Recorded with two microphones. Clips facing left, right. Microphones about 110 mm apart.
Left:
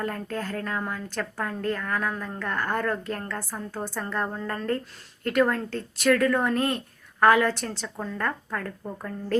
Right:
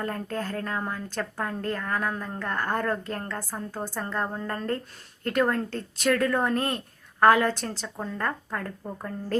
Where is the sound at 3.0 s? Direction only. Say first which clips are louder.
Left 1 dB; 35° right (ahead or behind).